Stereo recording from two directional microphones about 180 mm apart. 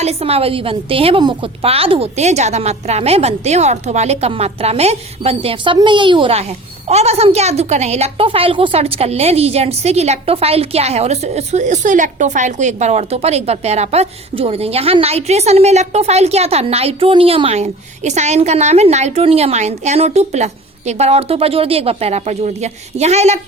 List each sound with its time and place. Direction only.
0.0 s a woman's voice: 35° right (ahead or behind)